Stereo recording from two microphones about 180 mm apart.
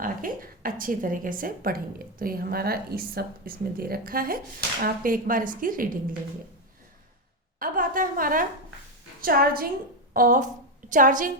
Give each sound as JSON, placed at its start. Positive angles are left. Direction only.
{"t": 0.0, "sound": "a woman's voice", "side_deg": -50}
{"t": 7.6, "sound": "a woman's voice", "side_deg": -50}